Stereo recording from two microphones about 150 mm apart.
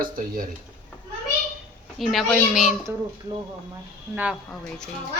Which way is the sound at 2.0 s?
Centre (ahead or behind).